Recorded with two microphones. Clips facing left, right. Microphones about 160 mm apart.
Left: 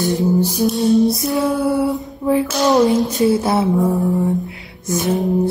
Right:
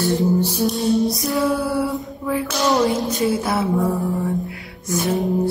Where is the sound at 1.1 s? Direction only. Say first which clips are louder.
Left 2 dB; 20° left (ahead or behind).